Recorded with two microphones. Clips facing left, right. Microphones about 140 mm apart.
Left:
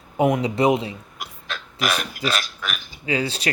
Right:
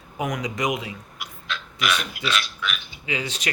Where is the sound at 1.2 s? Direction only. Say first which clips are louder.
Right 1 dB; 45° left (ahead or behind).